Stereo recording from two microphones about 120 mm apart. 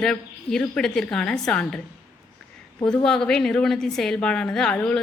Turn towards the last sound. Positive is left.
turn(degrees=10)  # may be behind; listen again after turning